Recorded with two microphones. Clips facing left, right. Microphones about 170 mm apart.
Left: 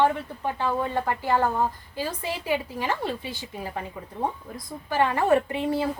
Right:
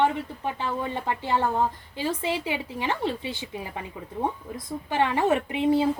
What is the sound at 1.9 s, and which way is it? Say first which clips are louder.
Speech: right 3 dB; 20° right (ahead or behind).